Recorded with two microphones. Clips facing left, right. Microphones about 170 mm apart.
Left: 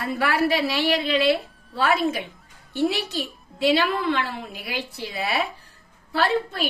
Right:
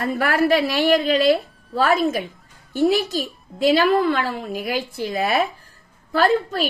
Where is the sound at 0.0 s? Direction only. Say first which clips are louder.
Right 3 dB; 50° right (ahead or behind).